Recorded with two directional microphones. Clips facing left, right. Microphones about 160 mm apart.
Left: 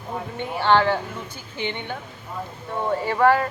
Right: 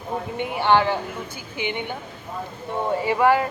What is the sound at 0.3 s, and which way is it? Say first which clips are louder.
Speech: even; 15° right (ahead or behind).